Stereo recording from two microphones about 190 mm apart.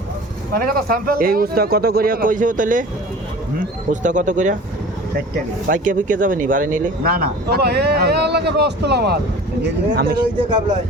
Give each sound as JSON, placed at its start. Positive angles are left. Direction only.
{"t": 0.5, "sound": "speech", "side_deg": -50}
{"t": 5.6, "sound": "speech", "side_deg": -45}